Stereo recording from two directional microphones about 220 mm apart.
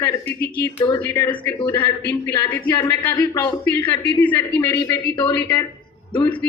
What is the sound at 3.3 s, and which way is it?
Speech, 20° left (ahead or behind).